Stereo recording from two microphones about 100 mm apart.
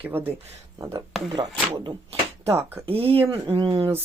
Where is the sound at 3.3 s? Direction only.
55° right (ahead or behind).